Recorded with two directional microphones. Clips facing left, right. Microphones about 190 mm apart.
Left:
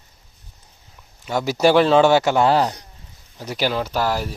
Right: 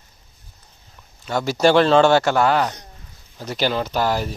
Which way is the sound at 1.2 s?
10° left (ahead or behind).